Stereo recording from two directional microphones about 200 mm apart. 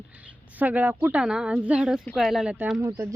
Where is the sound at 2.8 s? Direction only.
15° right (ahead or behind).